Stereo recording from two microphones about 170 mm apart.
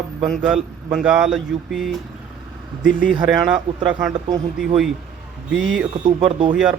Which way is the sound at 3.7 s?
35° right (ahead or behind).